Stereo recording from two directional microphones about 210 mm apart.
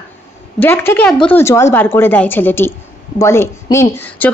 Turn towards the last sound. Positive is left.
turn(degrees=10)  # may be behind; listen again after turning